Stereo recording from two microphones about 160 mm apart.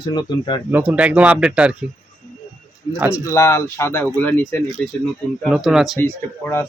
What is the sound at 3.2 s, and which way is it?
Speech, 20° left (ahead or behind).